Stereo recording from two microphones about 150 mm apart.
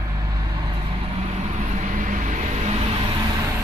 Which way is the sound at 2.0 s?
60° right (ahead or behind).